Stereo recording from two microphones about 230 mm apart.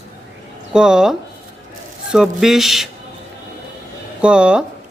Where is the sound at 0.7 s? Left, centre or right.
Centre.